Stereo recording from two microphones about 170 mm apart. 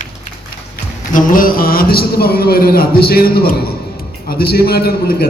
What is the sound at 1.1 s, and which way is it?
A man's voice, 55° left (ahead or behind).